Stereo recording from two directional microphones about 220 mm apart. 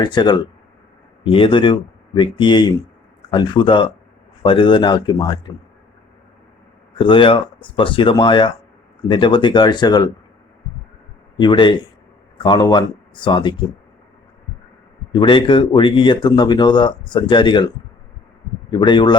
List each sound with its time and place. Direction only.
0.0 s speech: 20° left (ahead or behind)
7.0 s speech: 25° left (ahead or behind)
11.3 s speech: 20° left (ahead or behind)
15.1 s speech: 20° left (ahead or behind)
18.7 s speech: 20° left (ahead or behind)